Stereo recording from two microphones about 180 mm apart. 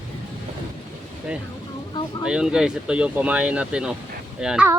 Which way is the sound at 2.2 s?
5° right (ahead or behind).